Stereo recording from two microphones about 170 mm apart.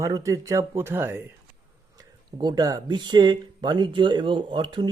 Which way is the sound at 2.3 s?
25° right (ahead or behind).